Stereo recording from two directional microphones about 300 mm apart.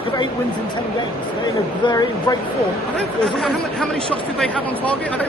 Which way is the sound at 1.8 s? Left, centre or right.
Centre.